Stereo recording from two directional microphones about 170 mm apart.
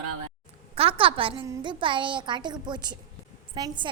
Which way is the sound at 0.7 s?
35° right (ahead or behind).